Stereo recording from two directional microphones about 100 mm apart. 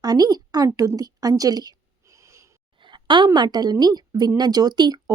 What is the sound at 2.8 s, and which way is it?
A woman's voice, 50° right (ahead or behind).